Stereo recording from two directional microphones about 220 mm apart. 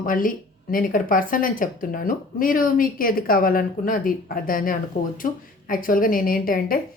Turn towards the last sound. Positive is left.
turn(degrees=40)  # may be behind; listen again after turning